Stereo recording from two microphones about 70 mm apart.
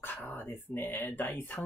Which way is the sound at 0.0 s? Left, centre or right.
Left.